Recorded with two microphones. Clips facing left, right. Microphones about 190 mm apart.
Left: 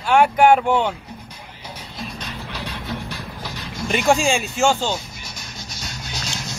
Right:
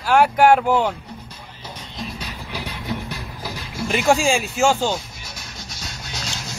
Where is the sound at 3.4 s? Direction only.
5° right (ahead or behind).